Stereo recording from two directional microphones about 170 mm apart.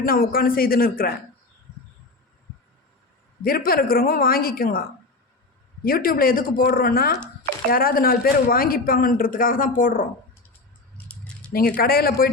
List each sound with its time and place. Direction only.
0.0 s a man's voice: 60° left (ahead or behind)
3.4 s a man's voice: 60° left (ahead or behind)
10.9 s a sound: 5° left (ahead or behind)
11.5 s a man's voice: 60° left (ahead or behind)